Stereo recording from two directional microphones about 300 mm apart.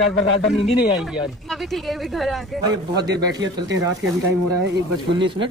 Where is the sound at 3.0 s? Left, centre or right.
Centre.